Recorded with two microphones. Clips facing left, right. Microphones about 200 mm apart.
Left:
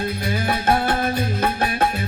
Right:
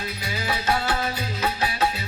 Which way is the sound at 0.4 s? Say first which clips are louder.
Left 4 dB; 55° left (ahead or behind).